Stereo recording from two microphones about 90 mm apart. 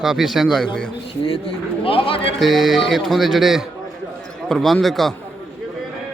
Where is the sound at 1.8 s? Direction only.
90° left.